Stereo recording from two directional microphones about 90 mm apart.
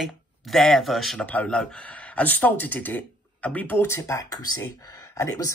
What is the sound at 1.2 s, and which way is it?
Speech, 15° left (ahead or behind).